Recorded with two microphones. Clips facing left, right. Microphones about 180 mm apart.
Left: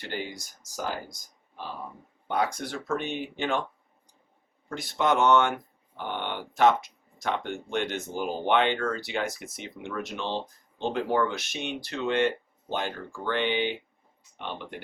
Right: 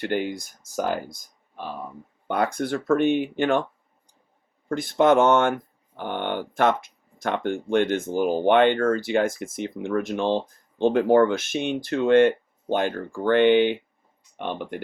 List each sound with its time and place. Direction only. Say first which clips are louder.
0.0 s speech: right 9 dB; 55° right (ahead or behind)
2.2 s speech: right 4 dB; 55° right (ahead or behind)
4.7 s speech: right 8 dB; 50° right (ahead or behind)